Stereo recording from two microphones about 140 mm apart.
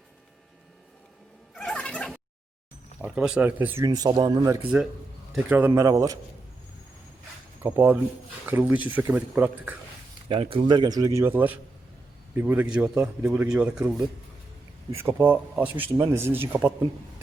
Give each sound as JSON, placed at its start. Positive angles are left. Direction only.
{"t": 1.5, "sound": "cat", "side_deg": 5}
{"t": 3.0, "sound": "speech", "side_deg": -5}
{"t": 3.8, "sound": "speech", "side_deg": -25}
{"t": 4.7, "sound": "speech", "side_deg": -10}
{"t": 7.6, "sound": "speech", "side_deg": -15}
{"t": 10.2, "sound": "speech", "side_deg": -40}
{"t": 12.6, "sound": "a man's voice", "side_deg": -5}